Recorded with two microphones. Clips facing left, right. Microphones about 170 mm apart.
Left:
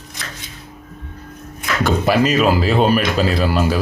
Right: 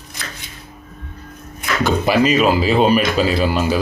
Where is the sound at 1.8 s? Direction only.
Centre (ahead or behind).